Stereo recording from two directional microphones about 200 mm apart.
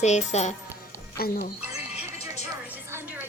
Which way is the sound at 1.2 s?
50° left (ahead or behind).